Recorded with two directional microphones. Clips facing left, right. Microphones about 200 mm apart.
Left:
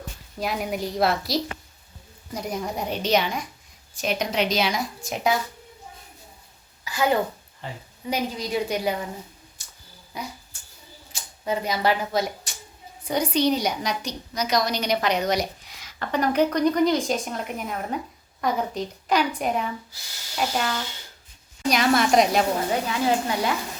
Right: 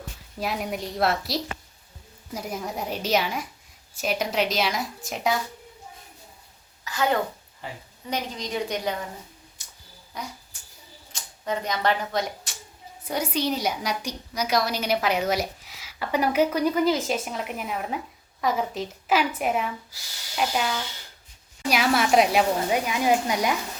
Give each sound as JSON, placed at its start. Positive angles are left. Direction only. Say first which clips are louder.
{"t": 0.3, "sound": "a woman's voice", "louder": "left 2 dB", "side_deg": 0}
{"t": 6.8, "sound": "a sound", "louder": "left 2 dB", "side_deg": 10}
{"t": 7.6, "sound": "a woman's voice", "louder": "left 1 dB", "side_deg": -10}
{"t": 8.1, "sound": "a woman's voice", "louder": "left 3 dB", "side_deg": 10}
{"t": 9.6, "sound": "a sound", "louder": "even", "side_deg": -20}
{"t": 10.1, "sound": "a woman's voice", "louder": "left 2 dB", "side_deg": 10}
{"t": 13.1, "sound": "a woman's voice", "louder": "left 4 dB", "side_deg": -5}